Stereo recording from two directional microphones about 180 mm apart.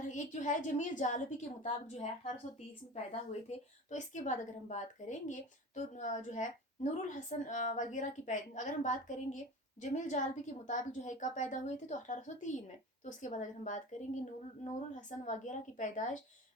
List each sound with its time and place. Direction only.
0.1 s a woman's voice: 45° left (ahead or behind)